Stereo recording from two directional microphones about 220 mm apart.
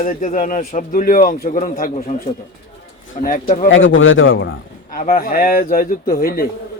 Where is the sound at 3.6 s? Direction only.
60° left (ahead or behind).